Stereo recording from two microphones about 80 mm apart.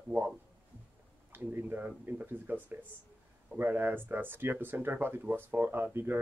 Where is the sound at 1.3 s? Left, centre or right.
Right.